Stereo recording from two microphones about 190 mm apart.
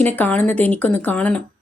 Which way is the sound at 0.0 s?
10° left (ahead or behind).